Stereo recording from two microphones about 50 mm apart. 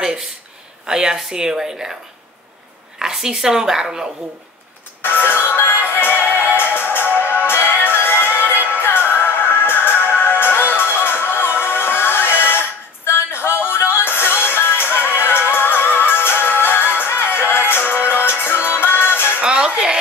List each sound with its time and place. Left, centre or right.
0.0 s a sound: centre
0.8 s a woman's voice: centre
3.0 s a woman's voice: centre
5.2 s music: left
8.5 s music: right
8.8 s music: left
19.2 s music: centre